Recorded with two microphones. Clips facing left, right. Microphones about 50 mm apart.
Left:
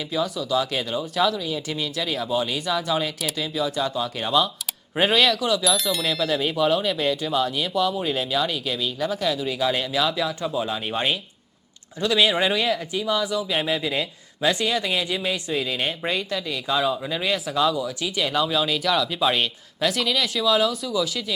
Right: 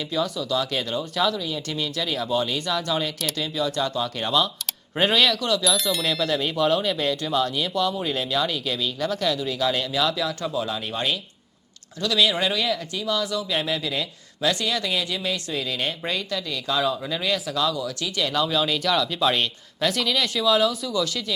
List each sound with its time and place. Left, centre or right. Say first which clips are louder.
0.1 s speech: left 2 dB; centre